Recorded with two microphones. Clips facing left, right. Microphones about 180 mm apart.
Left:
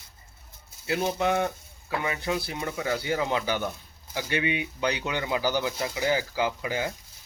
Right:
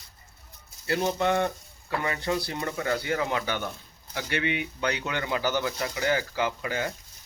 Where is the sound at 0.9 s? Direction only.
5° left (ahead or behind).